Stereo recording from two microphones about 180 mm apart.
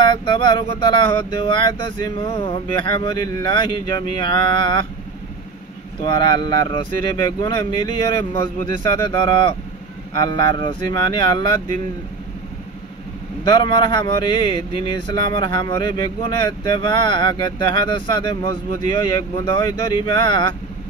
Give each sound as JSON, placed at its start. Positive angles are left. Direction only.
{"t": 0.0, "sound": "speech", "side_deg": 25}
{"t": 6.0, "sound": "speech", "side_deg": 25}
{"t": 13.4, "sound": "speech", "side_deg": 25}